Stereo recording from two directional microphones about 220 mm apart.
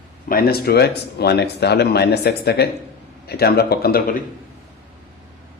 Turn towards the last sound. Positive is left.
turn(degrees=40)  # may be behind; listen again after turning